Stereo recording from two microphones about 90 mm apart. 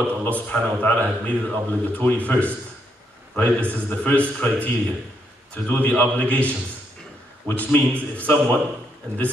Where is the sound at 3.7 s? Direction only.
20° left (ahead or behind).